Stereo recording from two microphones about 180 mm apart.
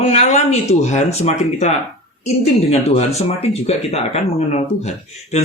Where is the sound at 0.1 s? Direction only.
40° left (ahead or behind).